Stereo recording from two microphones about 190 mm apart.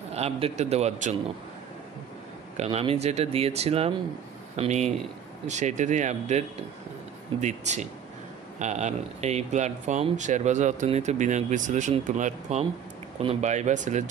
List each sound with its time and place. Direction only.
0.1 s speech: 35° right (ahead or behind)
2.5 s speech: 35° right (ahead or behind)